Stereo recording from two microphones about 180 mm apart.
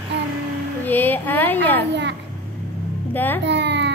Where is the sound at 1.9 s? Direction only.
75° right (ahead or behind).